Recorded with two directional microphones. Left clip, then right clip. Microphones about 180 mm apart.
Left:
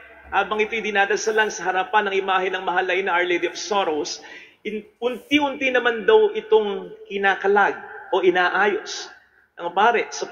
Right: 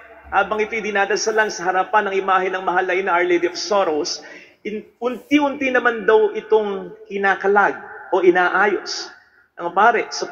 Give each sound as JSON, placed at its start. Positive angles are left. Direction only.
{"t": 0.3, "sound": "a man's voice", "side_deg": -25}